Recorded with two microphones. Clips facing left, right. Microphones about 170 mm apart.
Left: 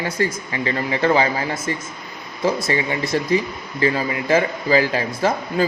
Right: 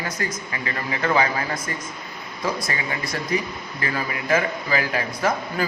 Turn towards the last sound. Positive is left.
turn(degrees=30)  # may be behind; listen again after turning